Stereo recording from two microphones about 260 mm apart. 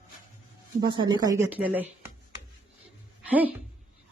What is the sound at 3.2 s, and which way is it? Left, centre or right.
Speech, centre.